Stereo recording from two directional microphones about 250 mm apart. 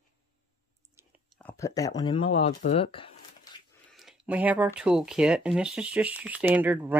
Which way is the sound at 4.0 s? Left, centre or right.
Centre.